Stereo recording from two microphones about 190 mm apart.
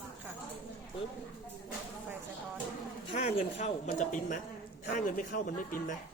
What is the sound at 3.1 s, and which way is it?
Speech, 35° left (ahead or behind).